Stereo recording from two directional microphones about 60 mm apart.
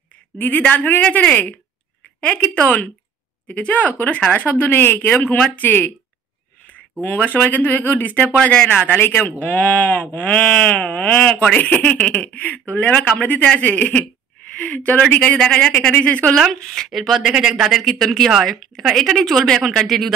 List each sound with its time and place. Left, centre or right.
0.4 s speech: left
16.9 s a woman's voice: centre
17.2 s speech: centre
17.8 s a woman's voice: centre